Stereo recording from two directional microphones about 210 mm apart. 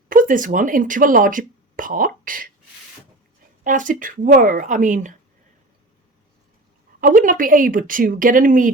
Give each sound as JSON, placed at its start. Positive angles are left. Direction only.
{"t": 0.1, "sound": "speech", "side_deg": -40}
{"t": 3.6, "sound": "speech", "side_deg": -40}
{"t": 7.0, "sound": "speech", "side_deg": -40}